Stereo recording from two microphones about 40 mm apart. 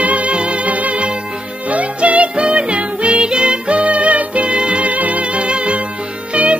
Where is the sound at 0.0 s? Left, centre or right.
Right.